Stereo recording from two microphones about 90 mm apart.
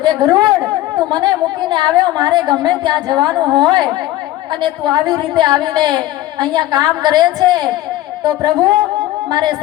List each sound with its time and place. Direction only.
0.2 s a woman's voice: 50° right (ahead or behind)